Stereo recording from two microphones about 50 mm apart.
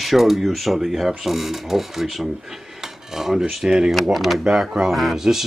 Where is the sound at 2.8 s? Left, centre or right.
Centre.